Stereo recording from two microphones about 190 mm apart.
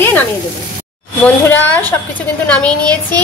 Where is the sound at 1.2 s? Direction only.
10° left (ahead or behind).